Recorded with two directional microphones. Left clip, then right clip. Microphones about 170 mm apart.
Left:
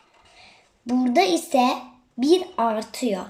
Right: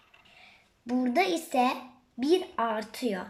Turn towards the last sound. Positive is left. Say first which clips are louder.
# left 6 dB
turn(degrees=15)  # may be behind; listen again after turning